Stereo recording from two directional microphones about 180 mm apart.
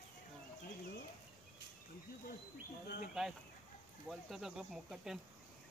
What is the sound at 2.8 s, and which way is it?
Speech, 60° left (ahead or behind).